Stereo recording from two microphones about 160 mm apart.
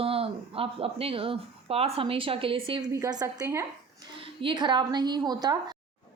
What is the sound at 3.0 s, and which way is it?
A woman's voice, 20° right (ahead or behind).